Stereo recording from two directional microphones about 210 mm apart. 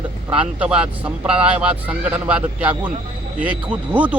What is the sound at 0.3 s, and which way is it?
Speech, 5° right (ahead or behind).